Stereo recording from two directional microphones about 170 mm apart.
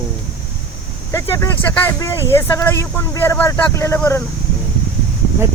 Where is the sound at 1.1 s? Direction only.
15° left (ahead or behind).